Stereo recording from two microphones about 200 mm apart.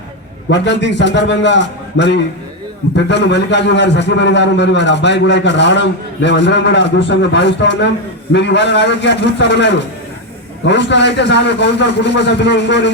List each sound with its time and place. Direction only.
0.5 s a man's voice: 60° left (ahead or behind)